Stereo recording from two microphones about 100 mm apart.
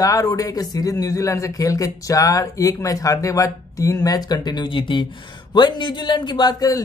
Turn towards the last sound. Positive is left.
turn(degrees=40)  # may be behind; listen again after turning